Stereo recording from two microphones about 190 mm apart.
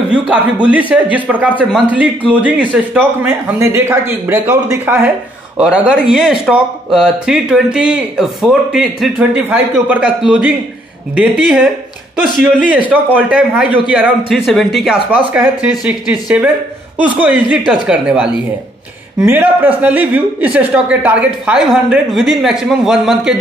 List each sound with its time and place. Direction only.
0.1 s speech: 5° right (ahead or behind)